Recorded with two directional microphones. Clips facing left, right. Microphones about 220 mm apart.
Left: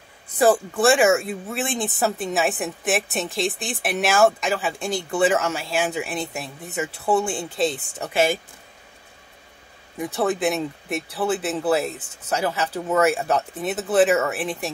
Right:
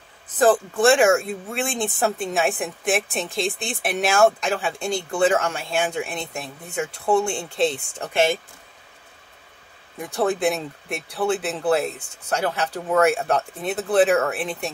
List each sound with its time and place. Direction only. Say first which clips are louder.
0.4 s speech: even; 5° left (ahead or behind)
9.9 s speech: even; centre (ahead or behind)